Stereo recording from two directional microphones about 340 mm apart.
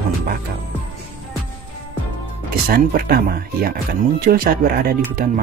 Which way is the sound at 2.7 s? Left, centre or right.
Right.